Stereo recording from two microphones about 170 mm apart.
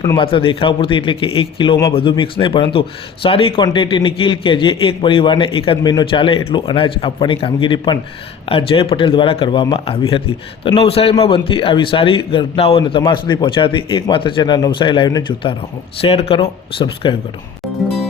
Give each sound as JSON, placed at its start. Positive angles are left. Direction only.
{"t": 0.2, "sound": "a man's voice", "side_deg": 30}